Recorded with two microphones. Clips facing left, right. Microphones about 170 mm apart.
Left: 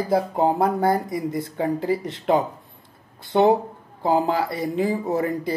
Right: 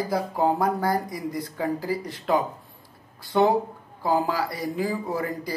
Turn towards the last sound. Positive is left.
turn(degrees=25)  # may be behind; listen again after turning